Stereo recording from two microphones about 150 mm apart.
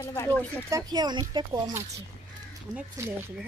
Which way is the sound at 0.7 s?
25° right (ahead or behind).